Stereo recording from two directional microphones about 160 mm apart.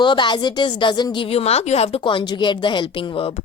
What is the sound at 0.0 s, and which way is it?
A woman's voice, 30° left (ahead or behind).